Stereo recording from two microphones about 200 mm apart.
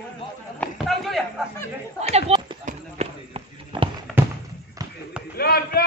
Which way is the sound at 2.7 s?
30° right (ahead or behind).